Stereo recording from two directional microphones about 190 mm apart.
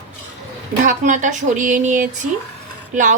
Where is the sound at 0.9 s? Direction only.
40° right (ahead or behind).